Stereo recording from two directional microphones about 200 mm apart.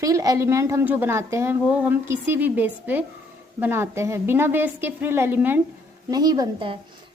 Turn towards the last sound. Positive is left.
turn(degrees=-20)  # may be behind; listen again after turning